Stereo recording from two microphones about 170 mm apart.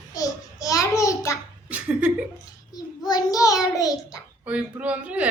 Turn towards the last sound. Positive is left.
turn(degrees=-10)  # may be behind; listen again after turning